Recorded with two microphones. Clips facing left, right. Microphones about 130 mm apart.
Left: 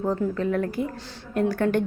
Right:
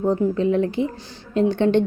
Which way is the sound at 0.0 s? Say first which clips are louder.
Right 5 dB; 20° right (ahead or behind).